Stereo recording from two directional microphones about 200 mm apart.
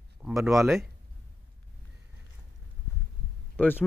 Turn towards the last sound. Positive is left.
turn(degrees=10)  # may be behind; listen again after turning